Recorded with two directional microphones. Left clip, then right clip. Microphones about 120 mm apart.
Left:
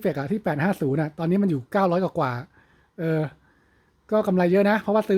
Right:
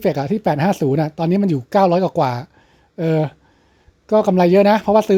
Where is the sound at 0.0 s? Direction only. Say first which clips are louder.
Right 8 dB; 25° right (ahead or behind).